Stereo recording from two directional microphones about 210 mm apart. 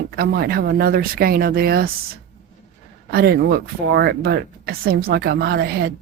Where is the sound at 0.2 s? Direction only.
50° right (ahead or behind).